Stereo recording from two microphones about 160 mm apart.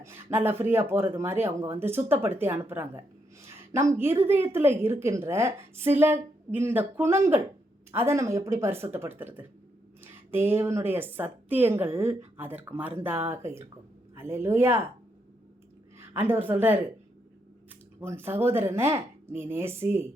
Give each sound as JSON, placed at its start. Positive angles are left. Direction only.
{"t": 0.0, "sound": "a sound", "side_deg": -15}
{"t": 0.6, "sound": "a woman's voice", "side_deg": -15}
{"t": 16.0, "sound": "a woman's voice", "side_deg": -15}
{"t": 18.0, "sound": "a woman's voice", "side_deg": -15}